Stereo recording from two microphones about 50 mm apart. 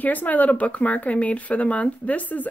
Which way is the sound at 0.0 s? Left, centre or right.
Left.